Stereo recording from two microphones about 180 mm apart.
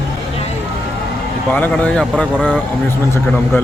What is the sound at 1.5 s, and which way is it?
Speech, 10° left (ahead or behind).